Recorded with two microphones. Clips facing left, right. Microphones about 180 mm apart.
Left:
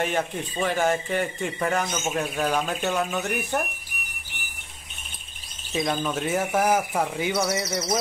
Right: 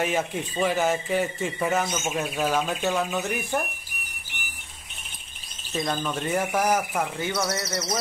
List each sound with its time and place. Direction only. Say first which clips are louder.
0.0 s speech: even; 5° right (ahead or behind)
5.7 s speech: left 2 dB; 5° left (ahead or behind)